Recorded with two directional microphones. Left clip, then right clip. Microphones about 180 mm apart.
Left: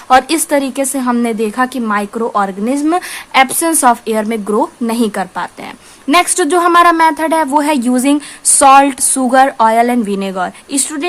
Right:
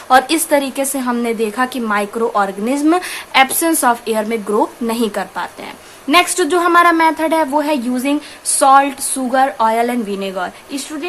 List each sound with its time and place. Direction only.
0.1 s a woman's voice: 35° left (ahead or behind)